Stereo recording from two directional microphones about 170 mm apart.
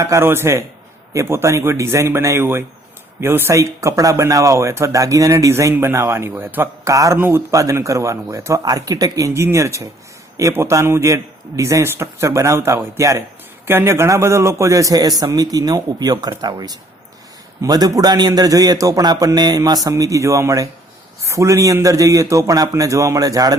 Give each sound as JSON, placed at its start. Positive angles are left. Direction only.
{"t": 0.0, "sound": "a man's voice", "side_deg": -15}